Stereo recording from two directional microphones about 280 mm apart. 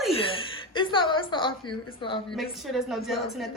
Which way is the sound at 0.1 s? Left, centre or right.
Centre.